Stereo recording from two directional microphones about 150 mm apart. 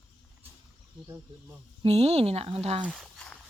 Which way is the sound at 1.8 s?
45° right (ahead or behind).